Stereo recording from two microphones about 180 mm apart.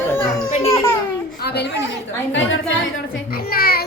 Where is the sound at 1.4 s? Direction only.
65° left (ahead or behind).